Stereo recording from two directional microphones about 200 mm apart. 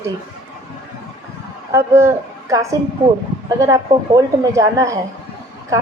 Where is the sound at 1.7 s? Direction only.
15° right (ahead or behind).